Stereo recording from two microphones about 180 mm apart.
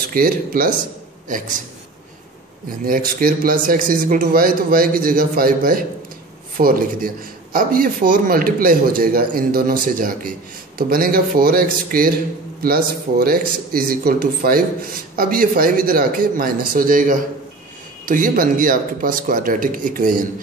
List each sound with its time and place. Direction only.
0.1 s speech: 55° right (ahead or behind)
2.9 s speech: 50° right (ahead or behind)